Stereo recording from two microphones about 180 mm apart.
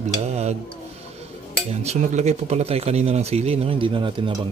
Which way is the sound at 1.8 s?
40° right (ahead or behind).